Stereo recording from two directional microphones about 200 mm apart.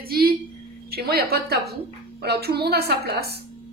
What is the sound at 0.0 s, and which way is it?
Speech, 50° right (ahead or behind).